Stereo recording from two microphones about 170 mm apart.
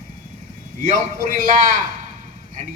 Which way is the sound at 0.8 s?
50° right (ahead or behind).